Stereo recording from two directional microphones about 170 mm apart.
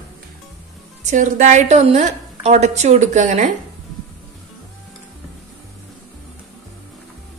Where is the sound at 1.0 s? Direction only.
45° right (ahead or behind).